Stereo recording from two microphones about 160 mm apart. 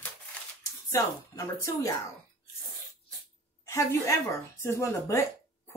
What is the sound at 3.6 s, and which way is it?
A woman's voice, 20° left (ahead or behind).